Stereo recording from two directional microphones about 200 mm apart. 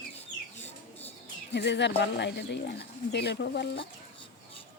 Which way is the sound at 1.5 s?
60° left (ahead or behind).